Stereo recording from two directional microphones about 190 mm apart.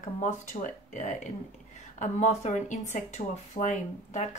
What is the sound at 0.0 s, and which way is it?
Speech, 40° left (ahead or behind).